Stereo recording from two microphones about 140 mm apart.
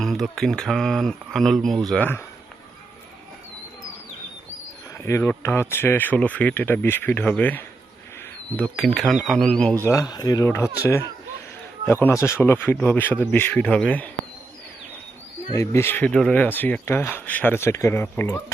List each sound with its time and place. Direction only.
0.0 s speech: 5° left (ahead or behind)
5.0 s speech: 20° left (ahead or behind)
9.8 s speech: 20° left (ahead or behind)
15.5 s speech: 20° left (ahead or behind)